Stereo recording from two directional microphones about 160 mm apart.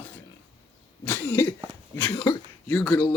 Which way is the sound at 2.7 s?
10° left (ahead or behind).